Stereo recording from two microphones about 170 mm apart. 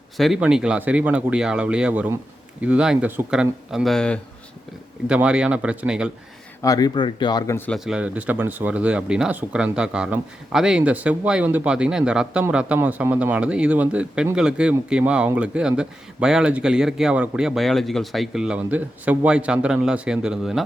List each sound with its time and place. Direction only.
0.2 s speech: 5° right (ahead or behind)
5.0 s speech: 5° right (ahead or behind)
6.6 s speech: 20° left (ahead or behind)
7.9 s speech: 5° right (ahead or behind)